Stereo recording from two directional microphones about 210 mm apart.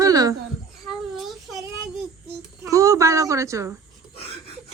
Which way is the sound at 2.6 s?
15° right (ahead or behind).